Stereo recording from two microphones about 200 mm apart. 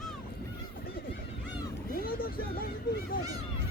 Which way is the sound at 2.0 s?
45° left (ahead or behind).